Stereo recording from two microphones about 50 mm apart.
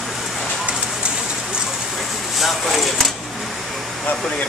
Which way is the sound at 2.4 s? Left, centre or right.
Centre.